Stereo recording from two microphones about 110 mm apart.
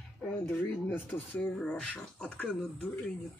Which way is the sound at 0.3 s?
15° left (ahead or behind).